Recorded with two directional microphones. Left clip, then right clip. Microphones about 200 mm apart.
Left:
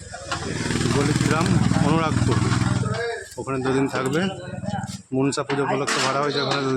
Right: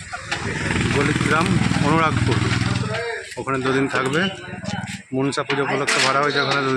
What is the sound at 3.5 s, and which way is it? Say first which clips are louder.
A man's voice: right 3 dB; centre (ahead or behind).